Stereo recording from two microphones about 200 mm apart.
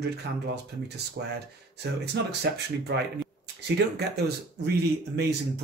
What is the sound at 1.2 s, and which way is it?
Speech, 50° right (ahead or behind).